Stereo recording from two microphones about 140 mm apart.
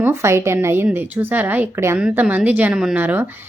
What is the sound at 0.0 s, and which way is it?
A woman's voice, 20° right (ahead or behind).